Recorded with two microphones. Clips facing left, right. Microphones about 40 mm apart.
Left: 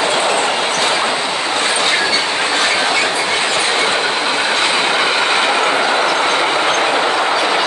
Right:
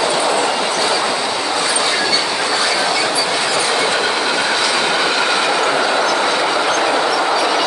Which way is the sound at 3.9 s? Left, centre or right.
Left.